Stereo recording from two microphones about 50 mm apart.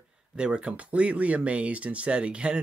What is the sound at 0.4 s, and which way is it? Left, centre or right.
Speech, right.